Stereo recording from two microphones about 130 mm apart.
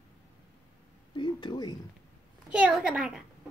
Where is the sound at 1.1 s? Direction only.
35° left (ahead or behind).